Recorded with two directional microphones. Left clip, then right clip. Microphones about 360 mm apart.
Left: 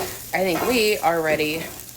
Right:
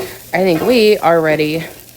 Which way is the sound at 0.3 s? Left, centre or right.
Right.